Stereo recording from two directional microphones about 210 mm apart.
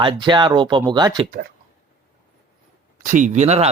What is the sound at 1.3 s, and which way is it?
Speech, 45° right (ahead or behind).